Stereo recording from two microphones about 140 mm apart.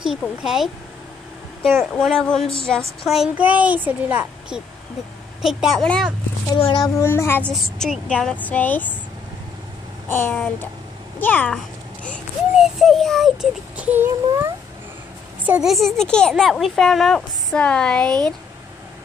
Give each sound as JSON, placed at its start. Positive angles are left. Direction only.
{"t": 0.4, "sound": "speech", "side_deg": -5}
{"t": 1.8, "sound": "speech", "side_deg": 5}
{"t": 6.5, "sound": "speech", "side_deg": 30}
{"t": 7.0, "sound": "a woman's voice", "side_deg": 20}
{"t": 7.5, "sound": "a woman's voice", "side_deg": 0}
{"t": 10.0, "sound": "a woman's voice", "side_deg": 15}
{"t": 11.5, "sound": "babbling", "side_deg": 10}
{"t": 12.5, "sound": "child singing", "side_deg": 0}
{"t": 15.4, "sound": "speech", "side_deg": -5}